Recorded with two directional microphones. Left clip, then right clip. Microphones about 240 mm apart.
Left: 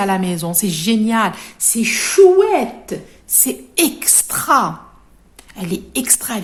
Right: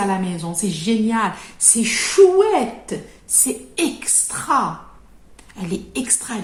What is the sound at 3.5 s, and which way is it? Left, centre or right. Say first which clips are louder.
A woman's voice: left 7 dB; left.